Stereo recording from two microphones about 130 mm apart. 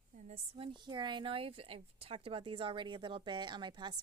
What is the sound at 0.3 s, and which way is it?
Speech, 45° right (ahead or behind).